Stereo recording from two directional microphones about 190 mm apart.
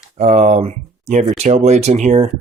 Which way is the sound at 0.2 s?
35° right (ahead or behind).